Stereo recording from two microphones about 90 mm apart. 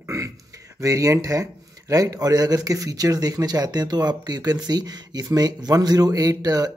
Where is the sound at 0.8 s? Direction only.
35° right (ahead or behind).